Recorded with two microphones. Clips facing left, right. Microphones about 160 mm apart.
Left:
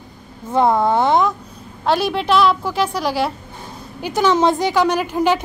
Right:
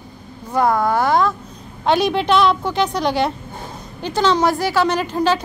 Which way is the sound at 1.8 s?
Centre (ahead or behind).